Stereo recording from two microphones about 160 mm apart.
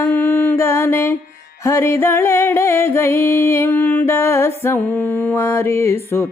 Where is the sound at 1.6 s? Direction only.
15° left (ahead or behind).